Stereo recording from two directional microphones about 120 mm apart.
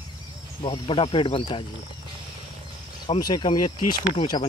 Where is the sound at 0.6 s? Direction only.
45° left (ahead or behind).